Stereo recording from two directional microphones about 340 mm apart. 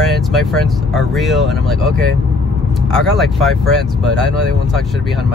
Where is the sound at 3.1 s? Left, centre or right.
Centre.